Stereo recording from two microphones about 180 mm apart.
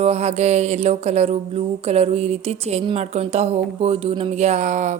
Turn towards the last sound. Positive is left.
turn(degrees=-45)  # may be behind; listen again after turning